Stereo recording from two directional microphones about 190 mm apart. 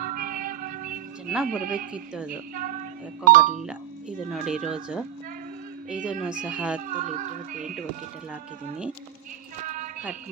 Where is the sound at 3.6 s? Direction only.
5° right (ahead or behind).